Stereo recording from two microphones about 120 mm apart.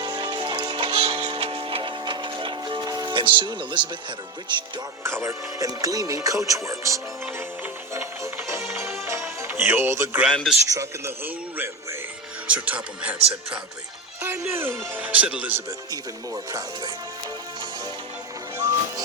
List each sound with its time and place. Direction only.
0.0 s music: 40° right (ahead or behind)
5.0 s speech: 25° right (ahead or behind)
10.3 s speech: centre (ahead or behind)
10.7 s speech: 25° right (ahead or behind)
12.5 s speech: 10° right (ahead or behind)
14.2 s speech: 25° right (ahead or behind)
15.9 s speech: 30° right (ahead or behind)
18.5 s music: 30° right (ahead or behind)